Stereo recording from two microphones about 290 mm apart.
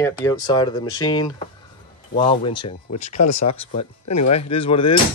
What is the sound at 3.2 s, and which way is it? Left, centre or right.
Speech, left.